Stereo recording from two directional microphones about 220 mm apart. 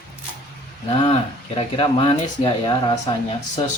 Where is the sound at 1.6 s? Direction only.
25° left (ahead or behind).